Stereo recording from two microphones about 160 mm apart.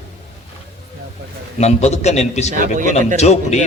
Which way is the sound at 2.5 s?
55° right (ahead or behind).